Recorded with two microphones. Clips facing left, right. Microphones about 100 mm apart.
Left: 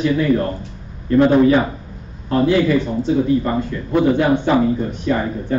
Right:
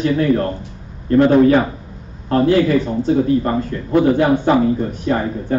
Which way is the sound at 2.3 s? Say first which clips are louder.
Right 1 dB; 45° right (ahead or behind).